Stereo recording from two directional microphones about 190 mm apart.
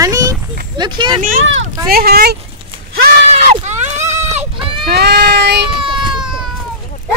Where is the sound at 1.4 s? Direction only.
75° right (ahead or behind).